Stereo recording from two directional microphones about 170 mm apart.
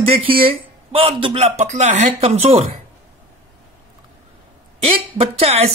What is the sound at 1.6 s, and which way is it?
Speech, 45° right (ahead or behind).